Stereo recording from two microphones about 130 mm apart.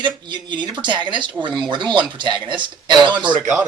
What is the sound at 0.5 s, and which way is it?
Speech, 35° right (ahead or behind).